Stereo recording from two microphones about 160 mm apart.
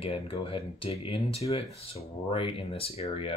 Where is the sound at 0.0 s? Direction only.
35° left (ahead or behind).